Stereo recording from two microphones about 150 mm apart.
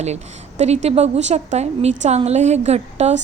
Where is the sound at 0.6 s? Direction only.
45° right (ahead or behind).